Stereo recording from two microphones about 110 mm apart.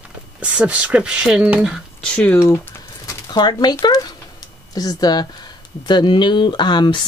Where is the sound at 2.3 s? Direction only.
20° left (ahead or behind).